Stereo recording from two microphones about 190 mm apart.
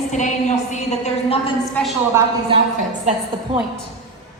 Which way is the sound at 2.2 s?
15° right (ahead or behind).